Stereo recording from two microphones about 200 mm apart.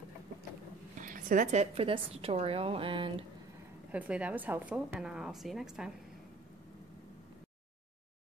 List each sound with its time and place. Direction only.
1.0 s a woman's voice: 40° right (ahead or behind)
3.9 s a woman's voice: 5° right (ahead or behind)